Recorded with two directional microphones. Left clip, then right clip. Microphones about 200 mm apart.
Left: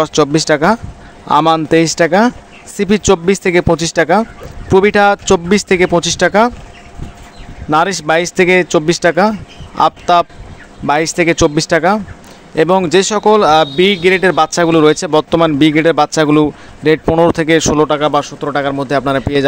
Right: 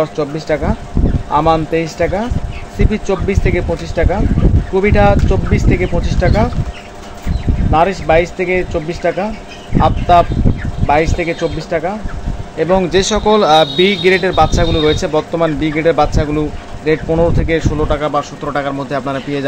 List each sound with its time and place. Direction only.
0.0 s speech: 55° left (ahead or behind)
7.7 s a man's voice: 55° left (ahead or behind); by 14.3 s 35° left (ahead or behind)
14.3 s speech: 45° left (ahead or behind)